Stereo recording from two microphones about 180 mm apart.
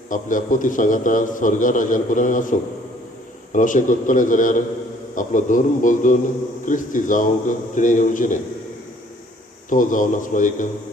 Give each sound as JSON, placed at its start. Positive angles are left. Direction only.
{"t": 0.1, "sound": "a man's voice", "side_deg": 45}
{"t": 9.6, "sound": "a man's voice", "side_deg": 45}